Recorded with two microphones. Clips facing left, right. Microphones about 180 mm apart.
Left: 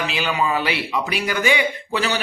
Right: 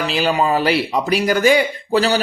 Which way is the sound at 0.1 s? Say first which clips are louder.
Right 8 dB; 40° right (ahead or behind).